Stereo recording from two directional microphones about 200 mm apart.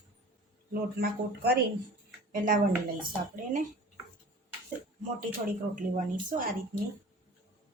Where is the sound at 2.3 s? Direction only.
45° right (ahead or behind).